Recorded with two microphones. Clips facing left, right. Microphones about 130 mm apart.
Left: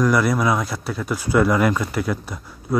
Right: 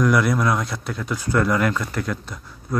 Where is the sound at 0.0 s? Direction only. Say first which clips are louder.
Left 1 dB; centre (ahead or behind).